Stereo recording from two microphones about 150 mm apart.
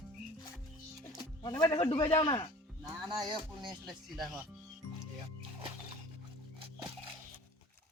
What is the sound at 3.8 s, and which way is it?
Speech, 5° right (ahead or behind).